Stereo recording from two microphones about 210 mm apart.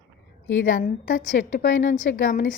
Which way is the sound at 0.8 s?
40° left (ahead or behind).